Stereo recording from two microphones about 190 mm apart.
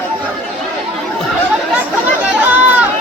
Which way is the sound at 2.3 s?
10° right (ahead or behind).